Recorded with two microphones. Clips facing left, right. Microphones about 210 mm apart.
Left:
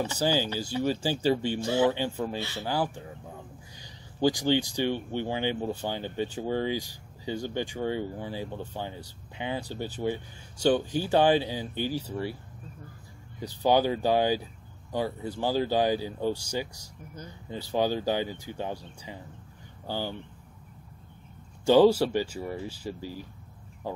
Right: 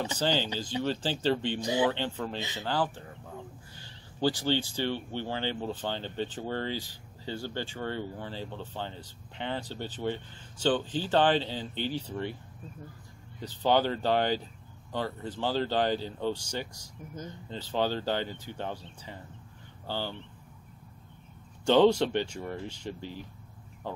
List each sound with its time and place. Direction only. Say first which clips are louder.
0.2 s speech: left 2 dB; 10° left (ahead or behind)
1.6 s speech: left 3 dB; 15° right (ahead or behind)
1.9 s speech: left 3 dB; 10° left (ahead or behind)
13.4 s speech: left 2 dB; 10° left (ahead or behind)
21.6 s speech: left 3 dB; 10° left (ahead or behind)